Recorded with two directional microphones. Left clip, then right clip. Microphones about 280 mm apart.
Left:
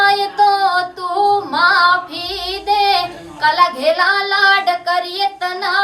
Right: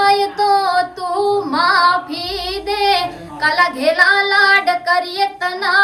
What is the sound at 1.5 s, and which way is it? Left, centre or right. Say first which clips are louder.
A woman's voice: right 1 dB; centre.